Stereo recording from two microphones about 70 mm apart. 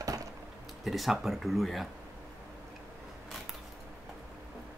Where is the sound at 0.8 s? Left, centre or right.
Centre.